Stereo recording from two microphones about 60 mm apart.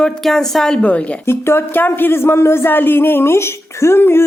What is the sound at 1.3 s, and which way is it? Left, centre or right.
Speech, left.